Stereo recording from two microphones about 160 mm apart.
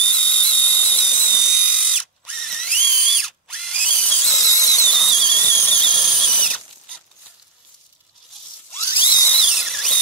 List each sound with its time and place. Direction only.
0.0 s dental drill: 5° left (ahead or behind)
1.4 s ratchet: centre (ahead or behind)
2.2 s drill: centre (ahead or behind)
4.8 s a sound: centre (ahead or behind)
8.9 s dental drill: 30° left (ahead or behind)
9.2 s dental drill: centre (ahead or behind)